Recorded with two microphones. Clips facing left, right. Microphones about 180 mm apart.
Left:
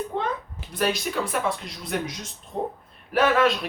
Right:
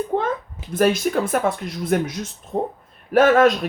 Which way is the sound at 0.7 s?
50° right (ahead or behind).